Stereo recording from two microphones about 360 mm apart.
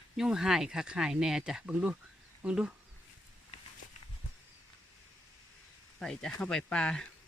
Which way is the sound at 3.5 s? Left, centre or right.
Centre.